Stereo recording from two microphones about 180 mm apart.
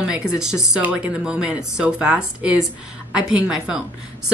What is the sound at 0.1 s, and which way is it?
A woman's voice, 5° right (ahead or behind).